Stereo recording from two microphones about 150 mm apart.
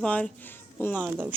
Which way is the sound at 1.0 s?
15° right (ahead or behind).